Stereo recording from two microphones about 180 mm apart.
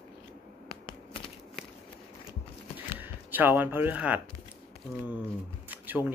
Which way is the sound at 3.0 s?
10° right (ahead or behind).